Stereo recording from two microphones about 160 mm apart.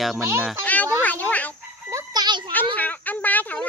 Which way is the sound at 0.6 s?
10° left (ahead or behind).